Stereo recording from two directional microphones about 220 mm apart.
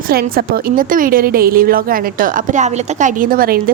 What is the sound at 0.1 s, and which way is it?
A woman's voice, 45° right (ahead or behind).